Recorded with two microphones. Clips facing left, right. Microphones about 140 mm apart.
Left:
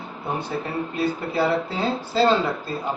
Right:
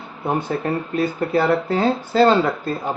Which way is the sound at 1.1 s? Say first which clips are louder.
Right 6 dB; 50° right (ahead or behind).